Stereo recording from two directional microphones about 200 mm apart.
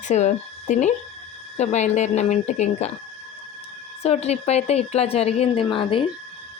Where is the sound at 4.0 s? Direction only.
30° left (ahead or behind).